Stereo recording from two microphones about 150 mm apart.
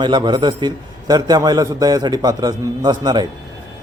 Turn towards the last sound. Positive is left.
turn(degrees=-30)  # may be behind; listen again after turning